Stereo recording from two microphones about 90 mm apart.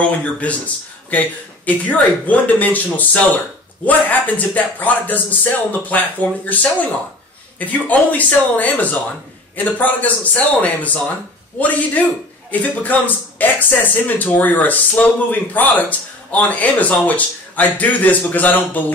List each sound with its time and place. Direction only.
0.2 s speech: 15° left (ahead or behind)
1.9 s speech: 15° left (ahead or behind)